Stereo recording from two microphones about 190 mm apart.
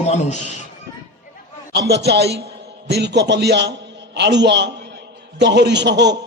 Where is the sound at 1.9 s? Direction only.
60° right (ahead or behind).